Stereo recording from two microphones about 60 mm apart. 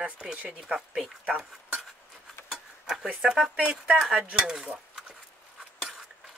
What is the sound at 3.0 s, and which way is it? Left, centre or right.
Speech, centre.